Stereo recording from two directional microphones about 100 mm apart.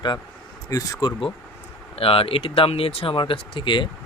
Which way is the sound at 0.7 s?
35° left (ahead or behind).